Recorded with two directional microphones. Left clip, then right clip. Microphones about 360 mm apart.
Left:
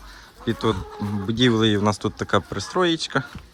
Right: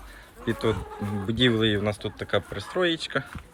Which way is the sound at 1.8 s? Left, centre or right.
Centre.